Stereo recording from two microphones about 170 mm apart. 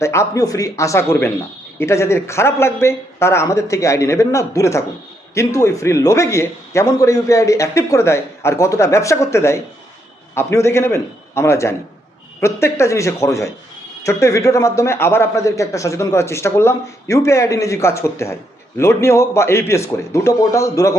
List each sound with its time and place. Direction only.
0.0 s a man's voice: 15° left (ahead or behind)